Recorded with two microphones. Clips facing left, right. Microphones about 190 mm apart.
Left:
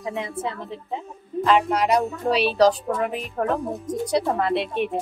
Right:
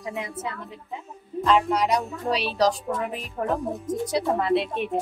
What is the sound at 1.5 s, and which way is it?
A woman's voice, centre (ahead or behind).